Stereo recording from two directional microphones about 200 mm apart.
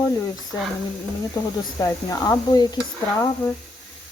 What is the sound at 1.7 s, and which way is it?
Speech, 20° left (ahead or behind).